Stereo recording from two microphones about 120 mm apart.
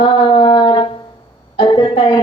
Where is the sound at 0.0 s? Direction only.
45° left (ahead or behind).